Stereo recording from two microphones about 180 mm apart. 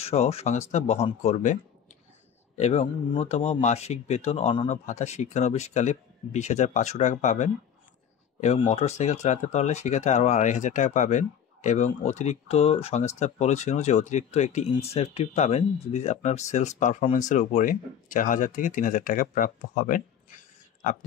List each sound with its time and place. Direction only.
0.0 s speech: 35° left (ahead or behind)